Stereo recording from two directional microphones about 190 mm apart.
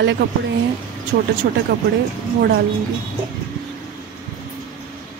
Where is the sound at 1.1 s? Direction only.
55° right (ahead or behind).